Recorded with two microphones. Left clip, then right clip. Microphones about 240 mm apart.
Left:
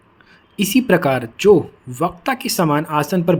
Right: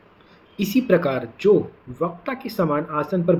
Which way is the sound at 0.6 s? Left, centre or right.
Left.